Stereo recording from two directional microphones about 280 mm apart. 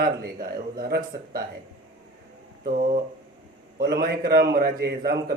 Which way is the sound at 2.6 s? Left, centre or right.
Right.